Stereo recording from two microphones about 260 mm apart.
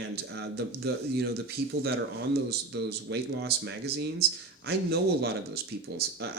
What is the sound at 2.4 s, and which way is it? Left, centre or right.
Speech, right.